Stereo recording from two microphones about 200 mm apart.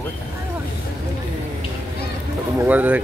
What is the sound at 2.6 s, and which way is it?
Speech, 10° right (ahead or behind).